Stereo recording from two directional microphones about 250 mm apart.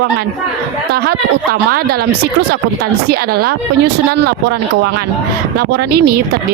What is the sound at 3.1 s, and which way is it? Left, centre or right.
Speech, right.